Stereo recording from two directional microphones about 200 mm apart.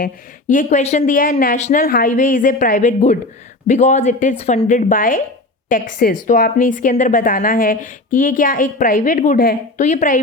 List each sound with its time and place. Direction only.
0.0 s a woman's voice: 45° left (ahead or behind)
1.8 s a woman's voice: 50° left (ahead or behind)